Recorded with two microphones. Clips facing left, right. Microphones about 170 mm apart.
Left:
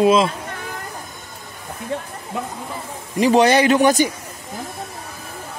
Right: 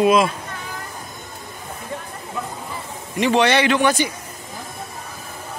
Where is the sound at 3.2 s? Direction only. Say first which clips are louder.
Left 3 dB; 40° left (ahead or behind).